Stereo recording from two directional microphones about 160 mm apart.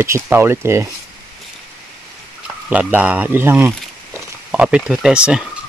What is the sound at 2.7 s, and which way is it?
Speech, 10° right (ahead or behind).